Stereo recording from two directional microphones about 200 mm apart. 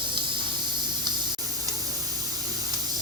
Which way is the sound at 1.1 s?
20° right (ahead or behind).